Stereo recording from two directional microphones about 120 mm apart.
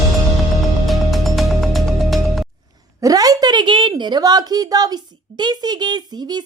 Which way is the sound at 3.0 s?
30° right (ahead or behind).